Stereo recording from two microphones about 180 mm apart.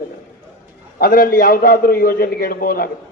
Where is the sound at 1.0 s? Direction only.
55° left (ahead or behind).